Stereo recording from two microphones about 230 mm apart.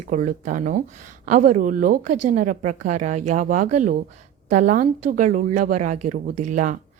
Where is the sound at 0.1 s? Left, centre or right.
Right.